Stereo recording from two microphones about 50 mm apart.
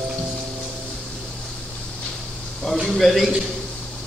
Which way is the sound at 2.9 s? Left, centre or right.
Centre.